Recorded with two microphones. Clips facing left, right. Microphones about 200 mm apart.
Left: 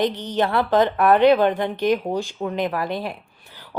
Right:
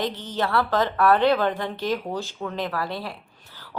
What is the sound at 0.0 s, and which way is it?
A woman's voice, 20° left (ahead or behind).